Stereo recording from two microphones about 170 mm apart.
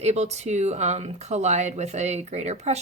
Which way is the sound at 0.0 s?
40° right (ahead or behind).